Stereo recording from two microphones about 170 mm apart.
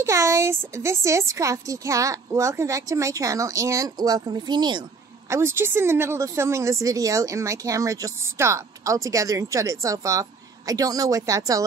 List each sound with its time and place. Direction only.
0.0 s speech: 15° right (ahead or behind)
5.3 s speech: 15° right (ahead or behind)